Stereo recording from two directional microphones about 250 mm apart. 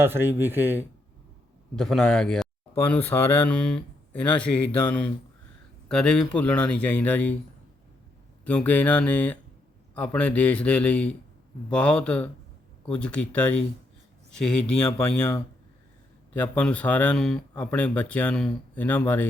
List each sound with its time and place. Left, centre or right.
0.0 s speech: centre
8.4 s speech: centre